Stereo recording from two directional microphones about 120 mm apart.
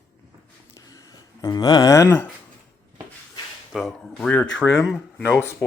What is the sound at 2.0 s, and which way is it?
Speech, 15° left (ahead or behind).